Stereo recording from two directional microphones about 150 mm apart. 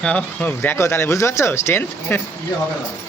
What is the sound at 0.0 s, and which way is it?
Speech, 10° left (ahead or behind).